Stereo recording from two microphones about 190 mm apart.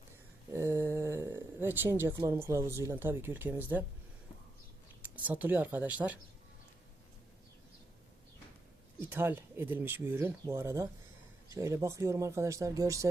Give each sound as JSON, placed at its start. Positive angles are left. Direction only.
{"t": 0.5, "sound": "a sound", "side_deg": -15}
{"t": 2.1, "sound": "speech", "side_deg": -15}
{"t": 5.1, "sound": "speech", "side_deg": -10}
{"t": 9.0, "sound": "speech", "side_deg": -10}